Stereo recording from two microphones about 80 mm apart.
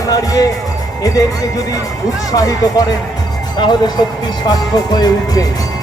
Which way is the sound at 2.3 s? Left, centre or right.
Left.